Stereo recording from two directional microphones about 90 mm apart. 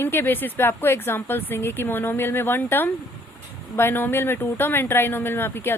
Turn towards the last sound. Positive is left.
turn(degrees=25)  # may be behind; listen again after turning